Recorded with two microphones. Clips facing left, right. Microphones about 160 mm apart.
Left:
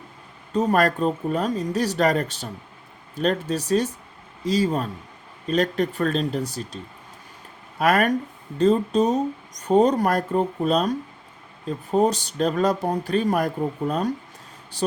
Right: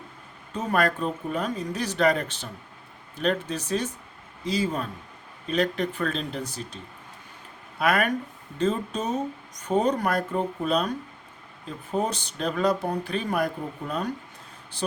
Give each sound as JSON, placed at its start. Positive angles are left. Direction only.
{"t": 0.5, "sound": "speech", "side_deg": 35}
{"t": 7.8, "sound": "speech", "side_deg": 40}